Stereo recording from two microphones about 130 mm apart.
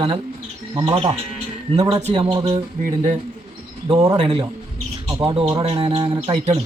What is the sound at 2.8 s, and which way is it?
Speech, 70° right (ahead or behind).